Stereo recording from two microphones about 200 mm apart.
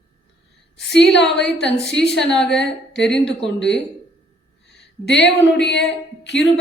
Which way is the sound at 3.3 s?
60° left (ahead or behind).